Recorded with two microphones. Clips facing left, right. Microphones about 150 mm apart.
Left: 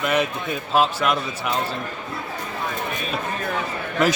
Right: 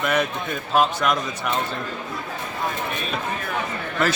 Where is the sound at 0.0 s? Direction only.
5° left (ahead or behind).